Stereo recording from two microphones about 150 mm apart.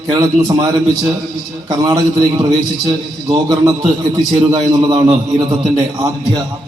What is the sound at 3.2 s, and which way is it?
A man's voice, 25° right (ahead or behind).